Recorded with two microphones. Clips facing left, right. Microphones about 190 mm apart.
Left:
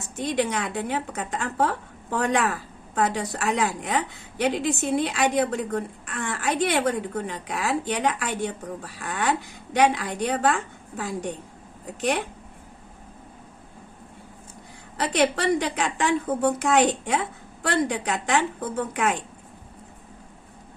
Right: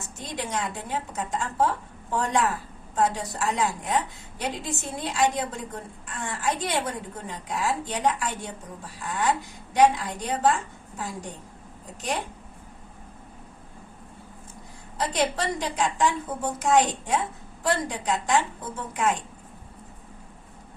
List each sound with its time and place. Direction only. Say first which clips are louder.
0.2 s a woman's voice: left 6 dB; 65° left (ahead or behind)
14.9 s a woman's voice: left 3 dB; 70° left (ahead or behind)